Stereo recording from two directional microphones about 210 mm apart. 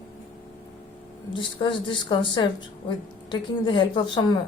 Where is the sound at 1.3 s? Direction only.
20° left (ahead or behind).